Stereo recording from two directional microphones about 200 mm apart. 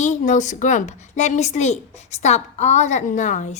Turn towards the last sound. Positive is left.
turn(degrees=40)  # may be behind; listen again after turning